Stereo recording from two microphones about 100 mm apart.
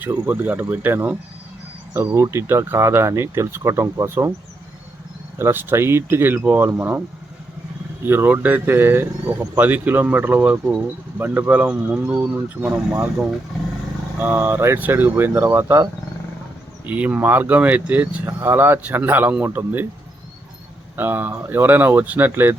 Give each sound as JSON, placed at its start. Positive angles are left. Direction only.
{"t": 0.3, "sound": "speech", "side_deg": -20}
{"t": 5.4, "sound": "speech", "side_deg": -25}
{"t": 8.0, "sound": "speech", "side_deg": -20}
{"t": 14.2, "sound": "speech", "side_deg": -20}
{"t": 16.8, "sound": "speech", "side_deg": -15}
{"t": 20.9, "sound": "speech", "side_deg": -20}